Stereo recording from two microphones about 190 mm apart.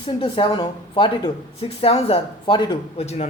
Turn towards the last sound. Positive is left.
turn(degrees=35)  # may be behind; listen again after turning